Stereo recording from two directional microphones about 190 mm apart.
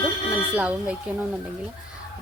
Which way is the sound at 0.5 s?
5° right (ahead or behind).